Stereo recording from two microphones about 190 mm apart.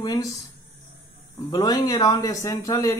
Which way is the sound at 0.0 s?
20° left (ahead or behind).